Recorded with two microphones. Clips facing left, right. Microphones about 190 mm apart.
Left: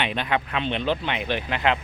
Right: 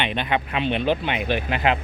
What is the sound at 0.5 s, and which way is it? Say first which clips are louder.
Speech: right 3 dB; 10° right (ahead or behind).